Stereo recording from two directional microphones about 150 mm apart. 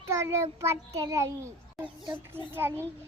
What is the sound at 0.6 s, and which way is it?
A child's voice, 20° right (ahead or behind).